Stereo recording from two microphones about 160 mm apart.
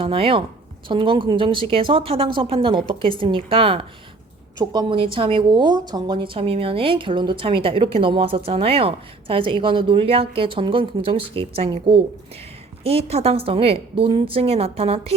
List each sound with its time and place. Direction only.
0.0 s speech: 35° right (ahead or behind)